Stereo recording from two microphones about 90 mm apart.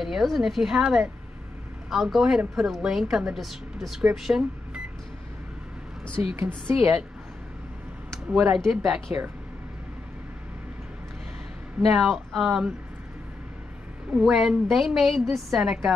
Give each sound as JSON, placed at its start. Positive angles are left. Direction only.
{"t": 0.0, "sound": "a woman's voice", "side_deg": 0}
{"t": 6.2, "sound": "a woman's voice", "side_deg": -20}
{"t": 6.7, "sound": "a woman's voice", "side_deg": -35}
{"t": 8.5, "sound": "a woman's voice", "side_deg": 0}
{"t": 11.8, "sound": "a woman's voice", "side_deg": 0}
{"t": 14.2, "sound": "a woman's voice", "side_deg": -5}